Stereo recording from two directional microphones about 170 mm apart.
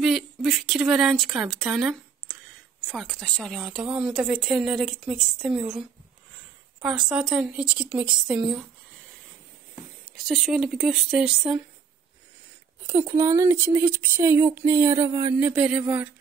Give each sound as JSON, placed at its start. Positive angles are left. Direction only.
{"t": 0.0, "sound": "speech", "side_deg": -5}
{"t": 10.2, "sound": "speech", "side_deg": 0}
{"t": 12.8, "sound": "speech", "side_deg": -15}